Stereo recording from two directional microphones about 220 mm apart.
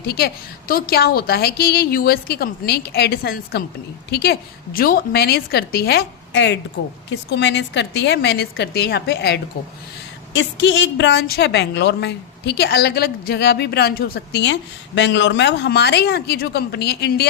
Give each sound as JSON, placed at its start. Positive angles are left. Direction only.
{"t": 0.0, "sound": "a woman's voice", "side_deg": 45}